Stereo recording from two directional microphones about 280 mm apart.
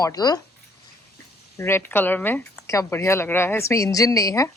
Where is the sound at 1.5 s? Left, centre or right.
Centre.